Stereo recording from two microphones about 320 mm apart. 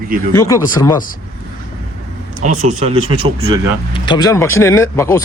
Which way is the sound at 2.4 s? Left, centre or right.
Right.